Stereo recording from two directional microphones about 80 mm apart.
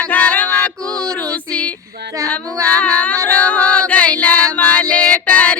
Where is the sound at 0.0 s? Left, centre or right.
Centre.